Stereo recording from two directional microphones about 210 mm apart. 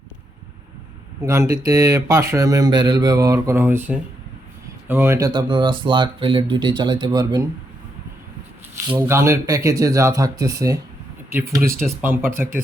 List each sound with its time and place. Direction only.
1.2 s speech: 15° right (ahead or behind)
9.0 s speech: 15° right (ahead or behind)